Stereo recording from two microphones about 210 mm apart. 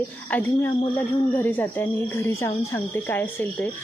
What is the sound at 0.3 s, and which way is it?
Speech, 10° left (ahead or behind).